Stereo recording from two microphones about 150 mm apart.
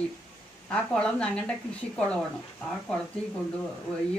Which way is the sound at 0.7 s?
5° left (ahead or behind).